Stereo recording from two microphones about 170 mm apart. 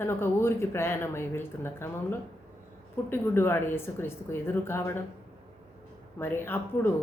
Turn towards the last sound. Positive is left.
turn(degrees=15)  # may be behind; listen again after turning